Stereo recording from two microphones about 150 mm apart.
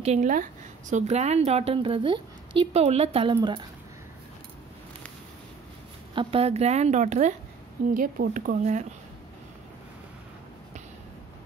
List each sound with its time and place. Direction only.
0.0 s a woman's voice: 50° right (ahead or behind)
6.1 s a woman's voice: 40° right (ahead or behind)
7.9 s speech: 70° right (ahead or behind)